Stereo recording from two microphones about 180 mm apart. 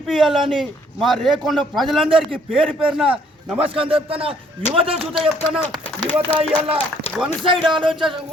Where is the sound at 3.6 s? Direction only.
30° right (ahead or behind).